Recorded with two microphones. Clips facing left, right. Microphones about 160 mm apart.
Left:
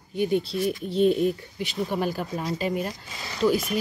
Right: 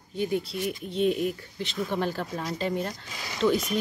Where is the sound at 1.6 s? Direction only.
15° left (ahead or behind).